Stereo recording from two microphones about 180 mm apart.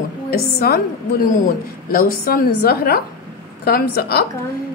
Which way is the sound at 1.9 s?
55° left (ahead or behind).